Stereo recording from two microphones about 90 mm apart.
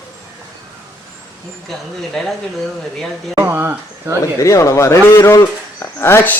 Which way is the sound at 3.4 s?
20° right (ahead or behind).